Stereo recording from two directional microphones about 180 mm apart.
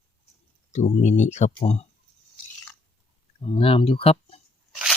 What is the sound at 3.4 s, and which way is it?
Speech, 30° left (ahead or behind).